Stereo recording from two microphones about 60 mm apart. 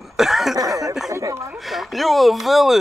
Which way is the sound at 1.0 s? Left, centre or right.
Right.